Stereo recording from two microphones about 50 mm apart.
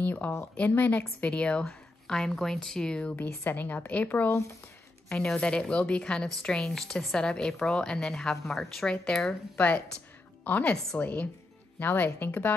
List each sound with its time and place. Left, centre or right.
0.0 s a sound: left
0.6 s a woman's voice: left
2.0 s a woman's voice: centre
3.2 s a woman's voice: left
5.2 s a woman's voice: centre
8.8 s a woman's voice: centre
10.5 s a woman's voice: left
11.8 s a woman's voice: left